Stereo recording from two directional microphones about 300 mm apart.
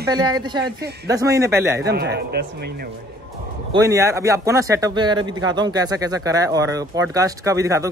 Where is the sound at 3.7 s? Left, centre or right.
Centre.